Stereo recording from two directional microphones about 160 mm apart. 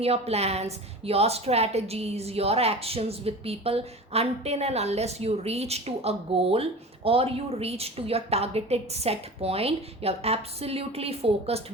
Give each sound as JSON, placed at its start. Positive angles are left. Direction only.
{"t": 0.0, "sound": "a woman's voice", "side_deg": -40}